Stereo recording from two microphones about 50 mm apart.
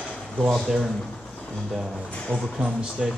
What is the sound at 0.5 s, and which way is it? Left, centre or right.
Speech, centre.